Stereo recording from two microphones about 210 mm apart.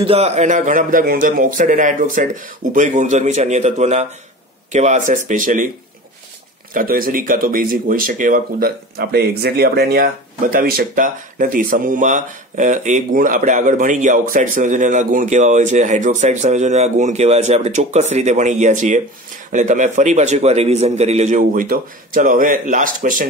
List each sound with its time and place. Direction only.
0.0 s speech: 30° right (ahead or behind)
6.7 s speech: 40° right (ahead or behind)